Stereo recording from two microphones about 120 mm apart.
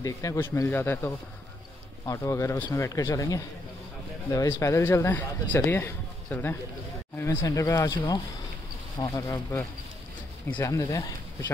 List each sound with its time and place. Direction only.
0.0 s a man's voice: 25° left (ahead or behind)
9.0 s a man's voice: 30° left (ahead or behind)